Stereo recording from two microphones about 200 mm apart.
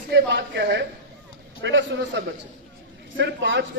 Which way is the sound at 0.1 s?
60° right (ahead or behind).